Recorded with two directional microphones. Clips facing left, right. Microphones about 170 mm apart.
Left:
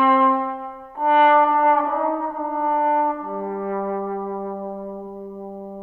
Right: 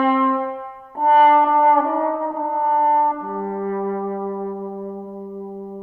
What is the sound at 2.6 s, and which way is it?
French horn, 40° right (ahead or behind).